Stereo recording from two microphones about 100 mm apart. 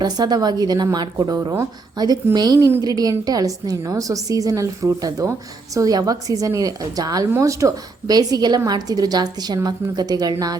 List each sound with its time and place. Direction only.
0.0 s a woman's voice: 40° right (ahead or behind)